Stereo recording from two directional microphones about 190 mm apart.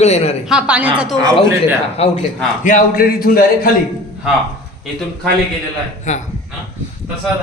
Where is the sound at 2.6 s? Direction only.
45° left (ahead or behind).